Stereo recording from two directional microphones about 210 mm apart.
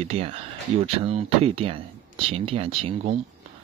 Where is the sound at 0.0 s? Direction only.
30° right (ahead or behind).